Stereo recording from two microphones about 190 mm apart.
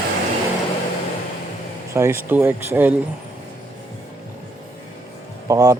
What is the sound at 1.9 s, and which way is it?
Speech, 15° right (ahead or behind).